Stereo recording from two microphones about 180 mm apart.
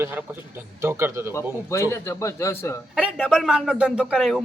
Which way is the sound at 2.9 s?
5° right (ahead or behind).